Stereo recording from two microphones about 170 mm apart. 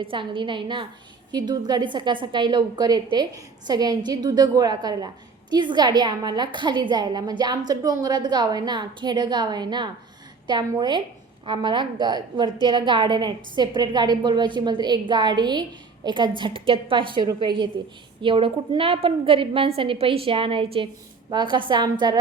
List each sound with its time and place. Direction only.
0.0 s a woman's voice: 30° right (ahead or behind)